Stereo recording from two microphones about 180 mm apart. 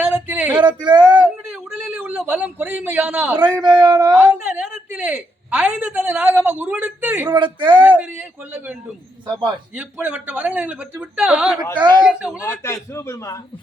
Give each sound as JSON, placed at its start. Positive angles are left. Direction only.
{"t": 0.0, "sound": "a sound", "side_deg": -10}
{"t": 0.8, "sound": "speech", "side_deg": -25}
{"t": 1.2, "sound": "a sound", "side_deg": -10}
{"t": 3.6, "sound": "speech", "side_deg": -25}
{"t": 4.1, "sound": "a woman's voice", "side_deg": -10}
{"t": 7.3, "sound": "speech", "side_deg": -25}
{"t": 7.8, "sound": "a woman's voice", "side_deg": -10}
{"t": 11.7, "sound": "speech", "side_deg": -25}
{"t": 12.0, "sound": "speech", "side_deg": -5}
{"t": 12.5, "sound": "a man's voice", "side_deg": 15}